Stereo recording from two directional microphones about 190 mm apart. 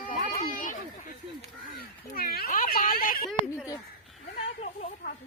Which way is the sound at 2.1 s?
50° left (ahead or behind).